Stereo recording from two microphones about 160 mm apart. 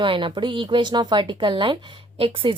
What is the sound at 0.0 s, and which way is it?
Speech, 30° right (ahead or behind).